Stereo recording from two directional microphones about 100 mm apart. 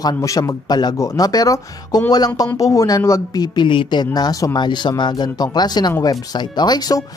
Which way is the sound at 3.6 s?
55° left (ahead or behind).